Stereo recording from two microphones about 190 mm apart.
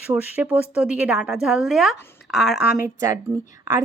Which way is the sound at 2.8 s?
15° right (ahead or behind).